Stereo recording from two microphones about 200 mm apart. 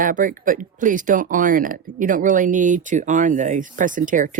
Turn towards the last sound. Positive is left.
turn(degrees=-40)  # may be behind; listen again after turning